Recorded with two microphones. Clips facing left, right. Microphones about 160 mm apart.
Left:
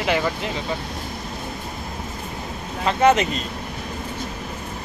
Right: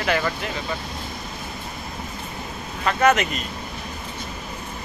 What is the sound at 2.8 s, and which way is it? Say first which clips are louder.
Speech: left 2 dB; 25° left (ahead or behind).